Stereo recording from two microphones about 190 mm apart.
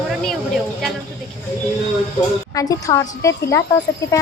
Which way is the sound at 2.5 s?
20° left (ahead or behind).